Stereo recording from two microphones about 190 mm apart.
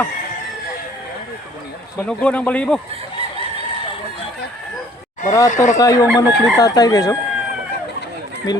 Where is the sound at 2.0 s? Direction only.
5° left (ahead or behind).